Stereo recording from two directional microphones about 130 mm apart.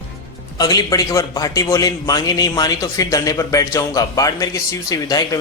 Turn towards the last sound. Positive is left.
turn(degrees=30)  # may be behind; listen again after turning